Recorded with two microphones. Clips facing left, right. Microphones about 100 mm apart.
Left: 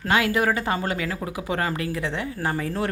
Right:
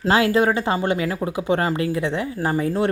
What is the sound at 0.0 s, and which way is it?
Speech, 30° right (ahead or behind).